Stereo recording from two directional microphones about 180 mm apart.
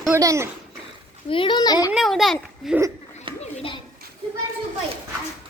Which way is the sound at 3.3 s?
30° right (ahead or behind).